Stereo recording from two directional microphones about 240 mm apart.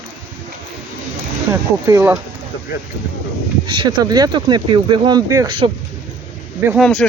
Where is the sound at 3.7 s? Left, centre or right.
Centre.